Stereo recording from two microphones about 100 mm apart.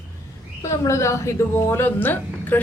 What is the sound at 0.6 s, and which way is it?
A woman's voice, 30° left (ahead or behind).